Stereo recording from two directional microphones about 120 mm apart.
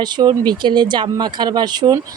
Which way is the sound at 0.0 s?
35° right (ahead or behind).